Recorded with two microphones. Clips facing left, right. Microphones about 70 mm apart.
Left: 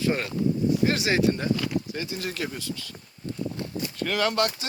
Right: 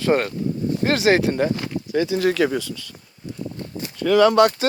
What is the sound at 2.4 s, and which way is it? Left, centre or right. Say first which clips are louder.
Speech: right 11 dB; right.